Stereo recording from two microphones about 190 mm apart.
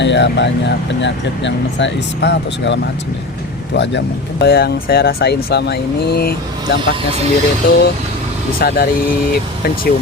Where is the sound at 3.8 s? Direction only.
65° left (ahead or behind).